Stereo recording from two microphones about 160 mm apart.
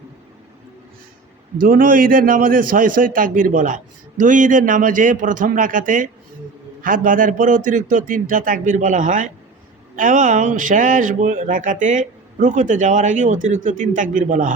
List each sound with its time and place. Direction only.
1.6 s a man's voice: 60° right (ahead or behind)